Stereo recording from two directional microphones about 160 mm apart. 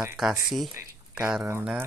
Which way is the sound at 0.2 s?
Centre (ahead or behind).